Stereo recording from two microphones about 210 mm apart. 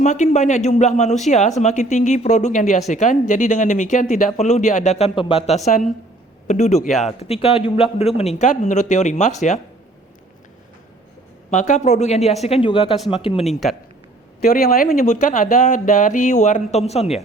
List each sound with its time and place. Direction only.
0.0 s speech: 35° left (ahead or behind)
11.5 s speech: 35° left (ahead or behind)
13.5 s speech: centre (ahead or behind)
14.4 s speech: 45° left (ahead or behind); by 17.2 s 30° left (ahead or behind)